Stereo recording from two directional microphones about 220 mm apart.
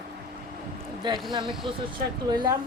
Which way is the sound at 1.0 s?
20° right (ahead or behind).